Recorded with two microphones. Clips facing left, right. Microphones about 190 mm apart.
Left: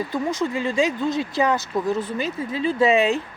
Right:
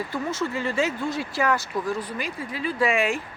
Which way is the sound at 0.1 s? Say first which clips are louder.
Left 4 dB; 15° left (ahead or behind).